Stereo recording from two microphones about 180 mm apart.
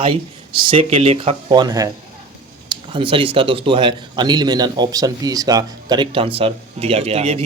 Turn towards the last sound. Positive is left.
turn(degrees=-35)  # may be behind; listen again after turning